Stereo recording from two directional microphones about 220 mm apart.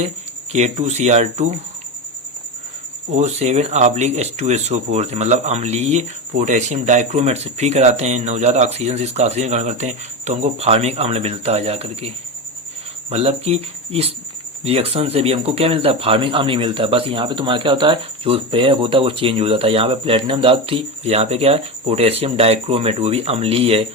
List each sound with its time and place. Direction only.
0.5 s speech: 30° right (ahead or behind)
3.2 s speech: 30° right (ahead or behind)